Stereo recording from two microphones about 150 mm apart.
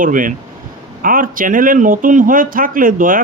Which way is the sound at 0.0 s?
65° right (ahead or behind).